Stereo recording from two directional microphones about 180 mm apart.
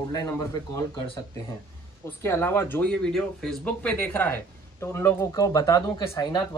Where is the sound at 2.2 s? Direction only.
15° left (ahead or behind).